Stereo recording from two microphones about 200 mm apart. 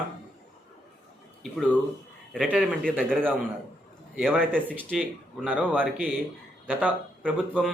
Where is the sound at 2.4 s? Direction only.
5° right (ahead or behind).